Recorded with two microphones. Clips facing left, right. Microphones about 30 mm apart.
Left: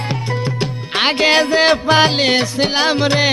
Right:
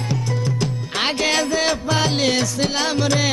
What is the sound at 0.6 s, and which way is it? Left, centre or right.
Music, left.